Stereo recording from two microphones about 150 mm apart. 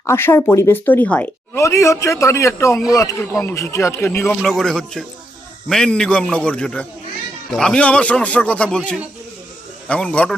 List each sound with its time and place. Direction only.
0.0 s speech: 15° left (ahead or behind)
4.4 s a man's voice: centre (ahead or behind)